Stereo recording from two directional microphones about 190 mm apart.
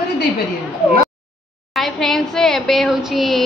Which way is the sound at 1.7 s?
Centre (ahead or behind).